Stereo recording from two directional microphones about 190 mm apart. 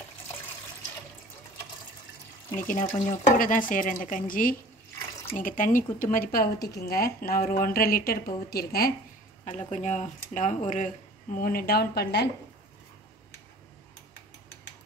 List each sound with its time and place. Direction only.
2.5 s speech: 45° left (ahead or behind)
9.7 s speech: 40° left (ahead or behind)
11.4 s speech: 50° left (ahead or behind)